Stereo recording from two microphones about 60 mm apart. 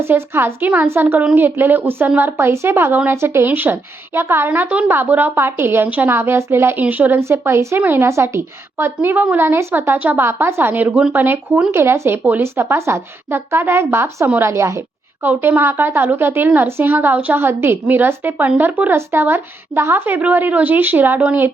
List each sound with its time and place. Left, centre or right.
0.0 s a woman's voice: right
6.7 s a woman's voice: right
7.2 s a woman's voice: right
7.8 s a woman's voice: right
8.0 s a woman's voice: right
9.0 s a woman's voice: right
9.9 s a woman's voice: right
10.8 s a woman's voice: right
15.2 s a woman's voice: right